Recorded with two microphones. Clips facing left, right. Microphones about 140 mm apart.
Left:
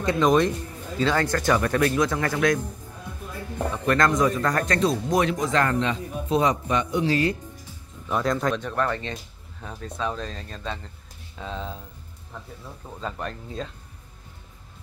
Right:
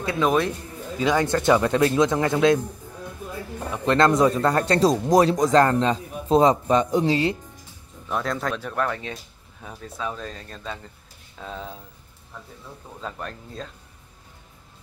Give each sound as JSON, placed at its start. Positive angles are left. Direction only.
{"t": 0.0, "sound": "speech", "side_deg": -5}
{"t": 3.7, "sound": "speech", "side_deg": -25}
{"t": 7.1, "sound": "speech", "side_deg": -25}
{"t": 8.1, "sound": "speech", "side_deg": 0}
{"t": 13.0, "sound": "speech", "side_deg": 0}